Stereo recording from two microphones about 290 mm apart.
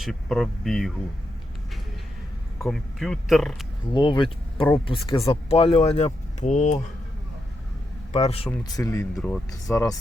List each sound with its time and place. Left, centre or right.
0.0 s speech: centre
2.6 s speech: centre
3.9 s speech: centre
8.1 s speech: left